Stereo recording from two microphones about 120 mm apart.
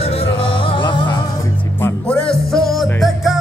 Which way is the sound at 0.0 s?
50° left (ahead or behind).